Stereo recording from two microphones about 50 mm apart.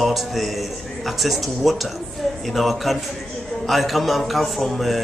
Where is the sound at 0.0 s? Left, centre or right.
Centre.